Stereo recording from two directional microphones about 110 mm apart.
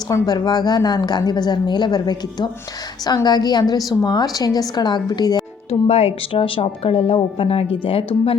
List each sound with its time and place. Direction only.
0.1 s a woman's voice: 40° left (ahead or behind)
5.9 s speech: 65° left (ahead or behind)